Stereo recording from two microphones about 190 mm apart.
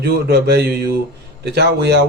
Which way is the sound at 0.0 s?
60° right (ahead or behind).